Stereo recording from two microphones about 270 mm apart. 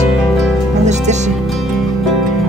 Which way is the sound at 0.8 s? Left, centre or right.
Right.